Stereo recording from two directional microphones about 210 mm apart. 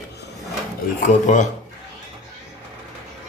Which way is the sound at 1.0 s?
35° left (ahead or behind).